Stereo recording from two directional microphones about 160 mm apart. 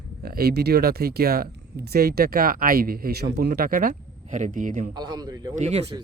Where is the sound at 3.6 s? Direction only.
60° right (ahead or behind).